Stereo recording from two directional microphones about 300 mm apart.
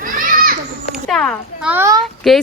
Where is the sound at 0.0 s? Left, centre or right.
Right.